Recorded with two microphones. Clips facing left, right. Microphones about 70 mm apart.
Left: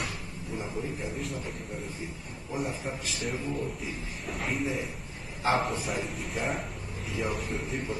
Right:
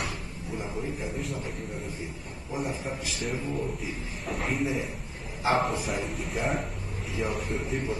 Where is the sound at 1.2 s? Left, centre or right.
Centre.